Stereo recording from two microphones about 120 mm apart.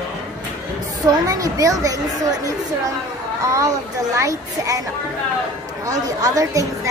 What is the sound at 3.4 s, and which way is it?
A woman's voice, 25° right (ahead or behind).